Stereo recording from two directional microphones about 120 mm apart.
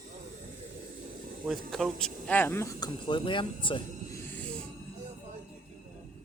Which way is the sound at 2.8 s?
40° left (ahead or behind).